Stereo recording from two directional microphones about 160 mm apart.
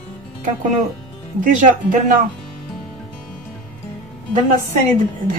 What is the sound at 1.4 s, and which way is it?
Speech, 55° right (ahead or behind).